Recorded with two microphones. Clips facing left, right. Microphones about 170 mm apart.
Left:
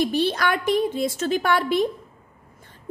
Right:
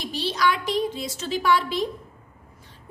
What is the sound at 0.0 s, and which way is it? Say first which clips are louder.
A woman's voice: left 3 dB; 55° left (ahead or behind).